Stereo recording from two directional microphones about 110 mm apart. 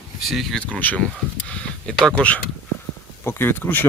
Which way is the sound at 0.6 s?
10° left (ahead or behind).